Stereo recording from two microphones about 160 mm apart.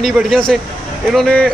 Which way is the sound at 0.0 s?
Centre (ahead or behind).